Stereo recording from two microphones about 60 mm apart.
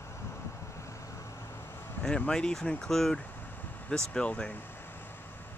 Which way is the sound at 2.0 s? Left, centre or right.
Centre.